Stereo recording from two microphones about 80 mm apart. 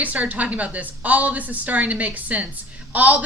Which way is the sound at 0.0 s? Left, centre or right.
Centre.